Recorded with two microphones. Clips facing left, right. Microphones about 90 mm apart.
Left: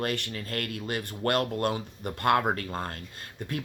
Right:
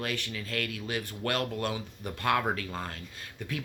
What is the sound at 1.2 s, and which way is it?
Speech, 45° left (ahead or behind).